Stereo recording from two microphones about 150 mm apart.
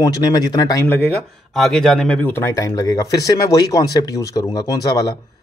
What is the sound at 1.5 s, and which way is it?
Speech, centre (ahead or behind).